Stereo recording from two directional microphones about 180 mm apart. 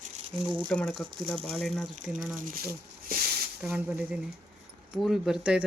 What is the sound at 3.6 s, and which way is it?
Speech, 5° right (ahead or behind).